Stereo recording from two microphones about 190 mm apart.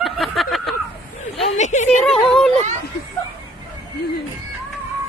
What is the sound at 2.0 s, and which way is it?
Speech, centre (ahead or behind).